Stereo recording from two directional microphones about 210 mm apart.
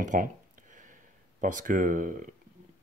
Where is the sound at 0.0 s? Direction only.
35° right (ahead or behind).